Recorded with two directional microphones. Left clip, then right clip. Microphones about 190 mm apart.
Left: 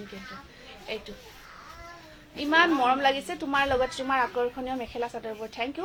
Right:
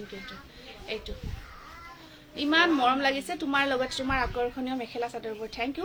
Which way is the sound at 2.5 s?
20° right (ahead or behind).